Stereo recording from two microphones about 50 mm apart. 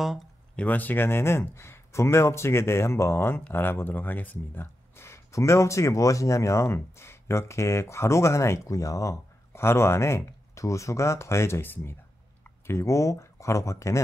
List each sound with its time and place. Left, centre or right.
0.6 s speech: left
3.5 s speech: left
4.9 s speech: left
11.6 s speech: left
12.6 s speech: left